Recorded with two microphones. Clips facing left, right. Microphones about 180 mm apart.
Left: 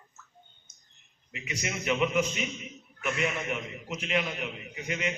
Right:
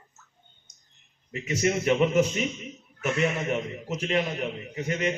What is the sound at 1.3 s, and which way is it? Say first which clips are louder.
A man's voice: right 10 dB; 45° right (ahead or behind).